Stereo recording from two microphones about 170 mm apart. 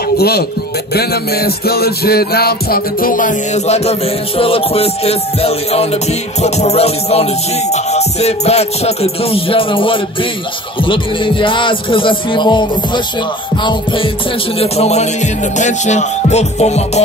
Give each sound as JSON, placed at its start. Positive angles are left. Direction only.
{"t": 0.2, "sound": "speech", "side_deg": 70}
{"t": 0.9, "sound": "music", "side_deg": 65}